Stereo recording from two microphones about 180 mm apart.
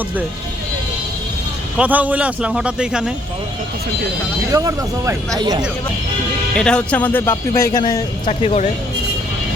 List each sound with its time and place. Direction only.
1.8 s a man's voice: 10° right (ahead or behind)
4.5 s speech: 20° right (ahead or behind)
6.6 s speech: 5° left (ahead or behind); by 8.0 s 25° left (ahead or behind)
8.3 s speech: 35° left (ahead or behind)